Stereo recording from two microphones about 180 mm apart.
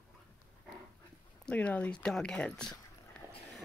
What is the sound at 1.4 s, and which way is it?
Speech, 5° left (ahead or behind).